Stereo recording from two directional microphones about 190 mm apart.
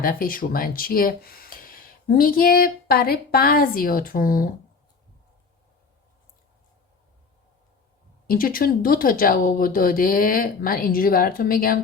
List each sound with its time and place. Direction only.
0.0 s speech: 50° left (ahead or behind)
8.3 s speech: 50° left (ahead or behind)